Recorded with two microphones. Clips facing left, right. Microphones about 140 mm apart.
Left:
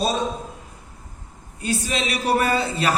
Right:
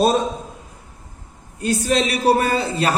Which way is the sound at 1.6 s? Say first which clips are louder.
Right 6 dB; 45° right (ahead or behind).